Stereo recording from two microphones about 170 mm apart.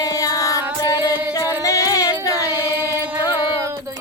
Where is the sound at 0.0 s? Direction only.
20° left (ahead or behind).